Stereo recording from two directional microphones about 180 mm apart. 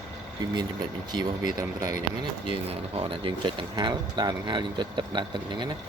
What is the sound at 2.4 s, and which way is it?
Speech, 30° right (ahead or behind).